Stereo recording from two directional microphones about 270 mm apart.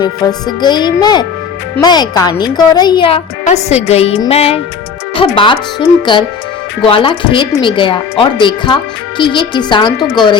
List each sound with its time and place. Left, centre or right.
0.0 s speech: centre
3.8 s music: left
6.8 s speech: centre